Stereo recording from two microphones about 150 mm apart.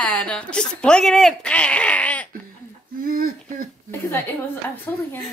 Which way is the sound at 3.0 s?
70° right (ahead or behind).